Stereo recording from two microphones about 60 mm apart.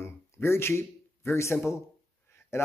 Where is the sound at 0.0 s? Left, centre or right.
Left.